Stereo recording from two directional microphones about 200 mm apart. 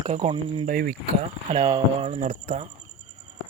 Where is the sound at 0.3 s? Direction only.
25° right (ahead or behind).